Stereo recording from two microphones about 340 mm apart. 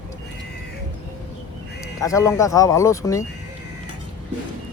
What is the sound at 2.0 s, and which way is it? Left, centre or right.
Speech, centre.